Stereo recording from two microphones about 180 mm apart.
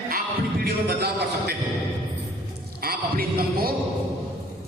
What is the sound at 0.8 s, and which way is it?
Speech, 65° right (ahead or behind).